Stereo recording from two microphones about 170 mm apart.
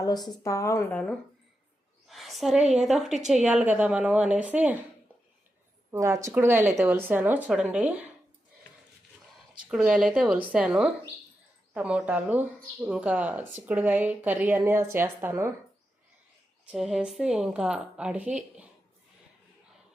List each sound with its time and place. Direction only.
0.0 s a woman's voice: 25° left (ahead or behind)
2.0 s a sound: centre (ahead or behind)
2.6 s a woman's voice: centre (ahead or behind)
5.9 s speech: 20° right (ahead or behind)
9.6 s a woman's voice: 5° right (ahead or behind)
16.7 s a woman's voice: 5° right (ahead or behind)